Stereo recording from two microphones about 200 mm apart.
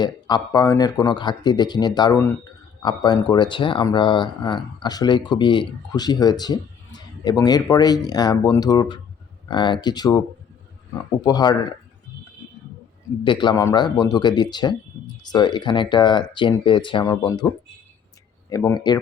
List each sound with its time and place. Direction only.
0.0 s speech: 20° left (ahead or behind)
13.2 s speech: 25° left (ahead or behind)
18.4 s speech: 20° left (ahead or behind)